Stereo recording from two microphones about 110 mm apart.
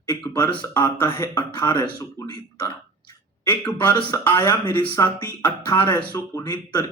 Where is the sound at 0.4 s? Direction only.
35° left (ahead or behind).